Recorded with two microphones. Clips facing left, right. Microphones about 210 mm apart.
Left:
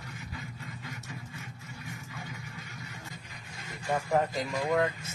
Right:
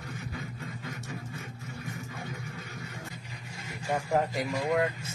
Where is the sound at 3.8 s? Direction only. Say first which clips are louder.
Even; centre (ahead or behind).